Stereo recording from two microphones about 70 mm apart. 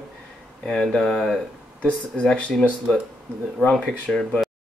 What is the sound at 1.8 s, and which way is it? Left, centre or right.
Speech, centre.